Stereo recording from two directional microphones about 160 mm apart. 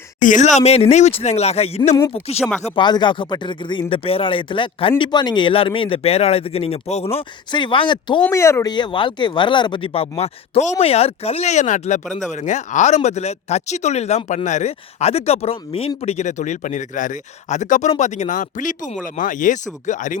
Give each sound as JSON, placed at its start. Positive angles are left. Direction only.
{"t": 0.2, "sound": "speech", "side_deg": 50}
{"t": 2.6, "sound": "speech", "side_deg": 30}
{"t": 8.3, "sound": "speech", "side_deg": 15}
{"t": 8.7, "sound": "speech", "side_deg": 30}